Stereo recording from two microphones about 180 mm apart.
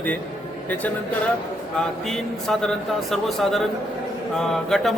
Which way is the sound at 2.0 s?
Centre (ahead or behind).